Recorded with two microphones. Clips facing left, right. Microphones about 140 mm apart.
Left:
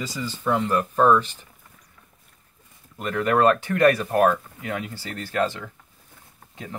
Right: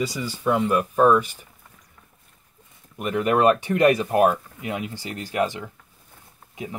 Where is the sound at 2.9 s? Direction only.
15° right (ahead or behind).